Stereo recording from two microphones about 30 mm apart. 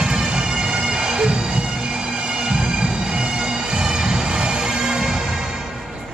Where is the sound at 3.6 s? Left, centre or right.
Right.